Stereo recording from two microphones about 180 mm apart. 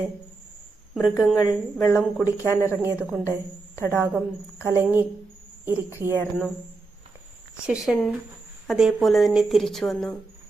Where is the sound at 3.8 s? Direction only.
15° left (ahead or behind).